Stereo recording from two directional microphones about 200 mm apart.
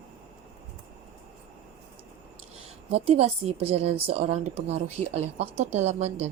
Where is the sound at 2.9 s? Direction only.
30° right (ahead or behind).